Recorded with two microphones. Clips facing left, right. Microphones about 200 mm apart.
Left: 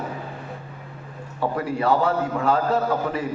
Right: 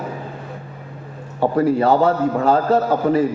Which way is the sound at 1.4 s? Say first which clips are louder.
Right 8 dB; 40° right (ahead or behind).